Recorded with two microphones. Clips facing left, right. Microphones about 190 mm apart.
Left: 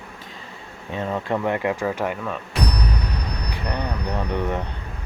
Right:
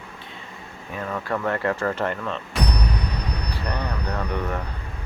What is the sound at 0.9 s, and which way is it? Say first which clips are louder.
Speech: left 3 dB; 25° left (ahead or behind).